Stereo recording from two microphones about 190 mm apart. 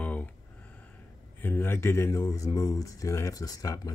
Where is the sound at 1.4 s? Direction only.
10° left (ahead or behind).